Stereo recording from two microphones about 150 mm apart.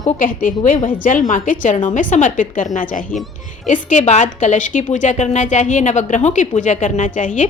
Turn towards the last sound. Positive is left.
turn(degrees=55)  # may be behind; listen again after turning